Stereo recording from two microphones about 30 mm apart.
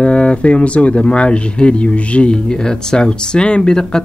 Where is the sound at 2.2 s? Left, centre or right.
Left.